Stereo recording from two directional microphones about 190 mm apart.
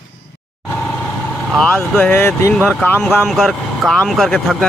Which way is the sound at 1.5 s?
5° left (ahead or behind).